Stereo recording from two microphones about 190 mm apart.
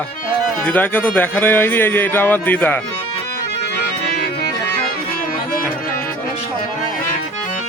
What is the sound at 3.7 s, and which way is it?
Music, 60° left (ahead or behind).